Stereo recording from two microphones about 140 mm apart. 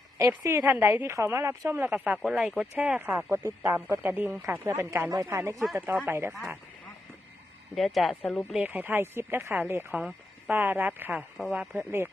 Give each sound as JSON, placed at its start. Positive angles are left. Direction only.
{"t": 0.2, "sound": "speech", "side_deg": -20}
{"t": 7.8, "sound": "speech", "side_deg": 0}
{"t": 8.6, "sound": "speech", "side_deg": -10}